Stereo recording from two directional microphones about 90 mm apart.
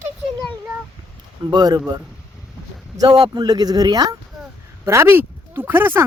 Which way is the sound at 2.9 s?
45° right (ahead or behind).